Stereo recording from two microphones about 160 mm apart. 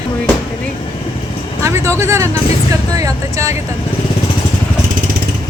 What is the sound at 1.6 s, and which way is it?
Vehicle, 20° right (ahead or behind).